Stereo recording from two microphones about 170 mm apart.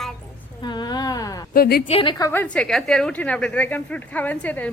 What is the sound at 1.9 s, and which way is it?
A woman's voice, 30° left (ahead or behind).